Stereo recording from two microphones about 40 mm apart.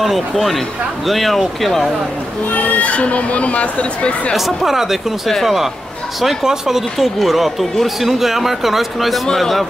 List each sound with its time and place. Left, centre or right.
0.0 s a man's voice: centre
2.5 s speech: left
4.4 s a man's voice: centre